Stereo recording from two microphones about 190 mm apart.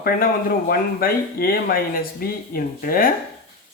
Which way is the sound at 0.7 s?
50° left (ahead or behind).